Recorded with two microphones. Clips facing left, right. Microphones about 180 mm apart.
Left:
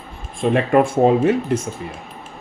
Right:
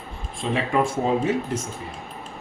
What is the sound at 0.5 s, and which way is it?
Speech, 60° left (ahead or behind).